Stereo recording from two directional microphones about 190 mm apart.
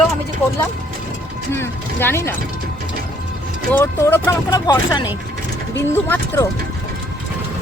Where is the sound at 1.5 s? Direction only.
10° left (ahead or behind).